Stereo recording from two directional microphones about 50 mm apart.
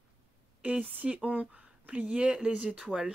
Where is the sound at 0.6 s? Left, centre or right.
Right.